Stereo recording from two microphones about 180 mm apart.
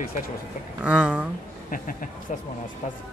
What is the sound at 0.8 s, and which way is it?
Speech, 5° right (ahead or behind).